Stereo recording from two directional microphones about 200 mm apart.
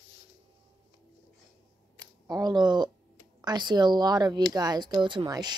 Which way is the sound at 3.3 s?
20° right (ahead or behind).